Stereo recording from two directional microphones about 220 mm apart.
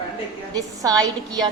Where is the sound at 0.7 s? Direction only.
15° right (ahead or behind).